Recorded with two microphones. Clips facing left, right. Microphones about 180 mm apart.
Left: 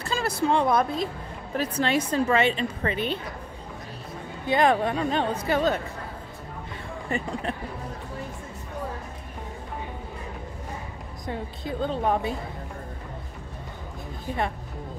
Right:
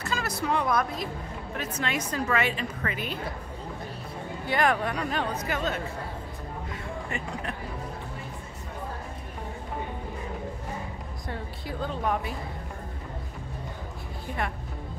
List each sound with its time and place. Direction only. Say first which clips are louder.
0.0 s a woman's voice: left 4 dB; 30° left (ahead or behind)
4.5 s a woman's voice: left 4 dB; 25° left (ahead or behind)
7.1 s speech: left 8 dB; 35° left (ahead or behind)
11.2 s a woman's voice: left 5 dB; 20° left (ahead or behind)